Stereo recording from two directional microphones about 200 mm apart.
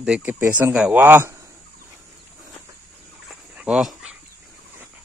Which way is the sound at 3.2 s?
5° right (ahead or behind).